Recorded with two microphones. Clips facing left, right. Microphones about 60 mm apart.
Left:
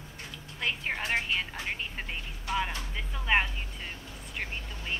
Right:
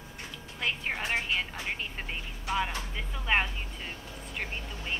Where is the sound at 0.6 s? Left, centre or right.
Centre.